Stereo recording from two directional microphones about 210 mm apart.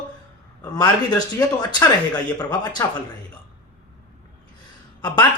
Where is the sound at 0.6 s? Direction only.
15° left (ahead or behind).